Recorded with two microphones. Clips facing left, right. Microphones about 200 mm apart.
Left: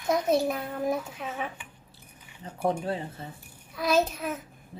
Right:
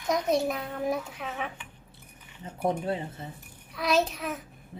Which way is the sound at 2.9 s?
25° right (ahead or behind).